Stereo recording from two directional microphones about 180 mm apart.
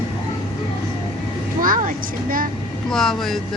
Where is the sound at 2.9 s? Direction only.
Centre (ahead or behind).